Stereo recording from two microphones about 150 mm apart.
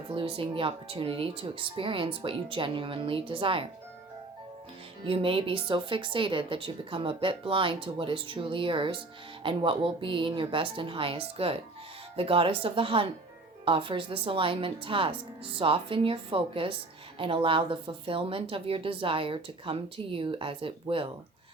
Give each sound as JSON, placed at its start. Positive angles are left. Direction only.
{"t": 0.1, "sound": "a woman's voice", "side_deg": -35}
{"t": 5.0, "sound": "a woman's voice", "side_deg": -35}